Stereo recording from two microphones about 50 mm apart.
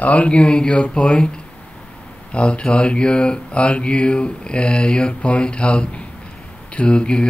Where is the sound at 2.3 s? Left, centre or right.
Left.